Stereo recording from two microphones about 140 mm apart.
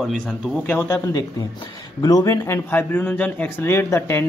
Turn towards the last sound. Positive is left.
turn(degrees=20)  # may be behind; listen again after turning